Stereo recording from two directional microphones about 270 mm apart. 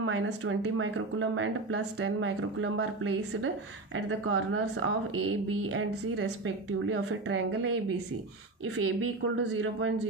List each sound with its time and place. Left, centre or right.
0.0 s speech: right
8.7 s speech: right